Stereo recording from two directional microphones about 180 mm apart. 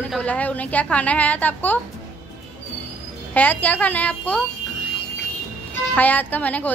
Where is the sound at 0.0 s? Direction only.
5° left (ahead or behind).